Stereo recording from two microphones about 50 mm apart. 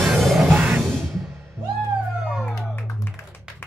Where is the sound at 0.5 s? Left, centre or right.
Right.